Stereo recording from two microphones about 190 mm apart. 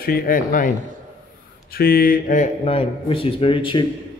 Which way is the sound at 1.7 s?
55° left (ahead or behind).